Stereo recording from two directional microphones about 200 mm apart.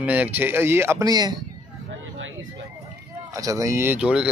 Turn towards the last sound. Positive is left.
turn(degrees=-5)  # may be behind; listen again after turning